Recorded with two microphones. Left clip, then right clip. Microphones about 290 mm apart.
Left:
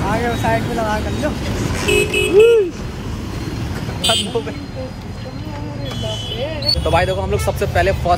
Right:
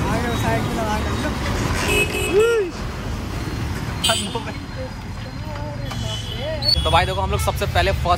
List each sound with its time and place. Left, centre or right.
0.0 s speech: centre
6.6 s speech: centre